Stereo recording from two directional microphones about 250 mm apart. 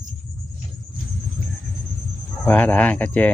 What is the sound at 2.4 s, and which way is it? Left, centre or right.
Speech, centre.